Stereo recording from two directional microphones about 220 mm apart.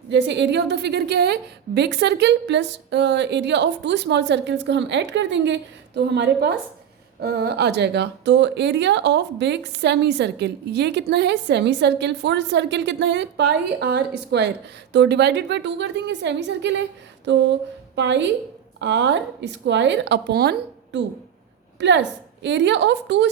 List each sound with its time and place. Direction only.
0.1 s a woman's voice: 55° right (ahead or behind)
17.9 s a woman's voice: 55° right (ahead or behind)